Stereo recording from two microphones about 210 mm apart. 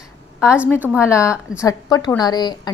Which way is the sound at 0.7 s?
10° right (ahead or behind).